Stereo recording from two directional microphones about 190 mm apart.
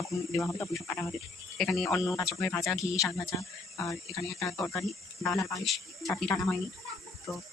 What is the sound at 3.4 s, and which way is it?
Speech, 15° left (ahead or behind).